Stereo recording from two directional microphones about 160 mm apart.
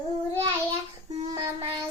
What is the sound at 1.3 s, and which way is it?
Child singing, 20° right (ahead or behind).